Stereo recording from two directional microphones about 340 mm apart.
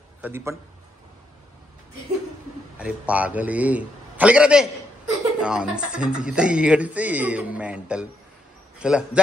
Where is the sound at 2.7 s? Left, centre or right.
Centre.